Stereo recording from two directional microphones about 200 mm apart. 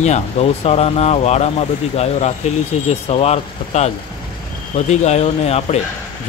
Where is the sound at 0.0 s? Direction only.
35° left (ahead or behind).